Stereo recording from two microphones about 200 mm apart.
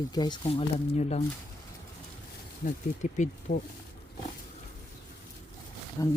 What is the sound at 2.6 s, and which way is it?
Speech, 45° left (ahead or behind).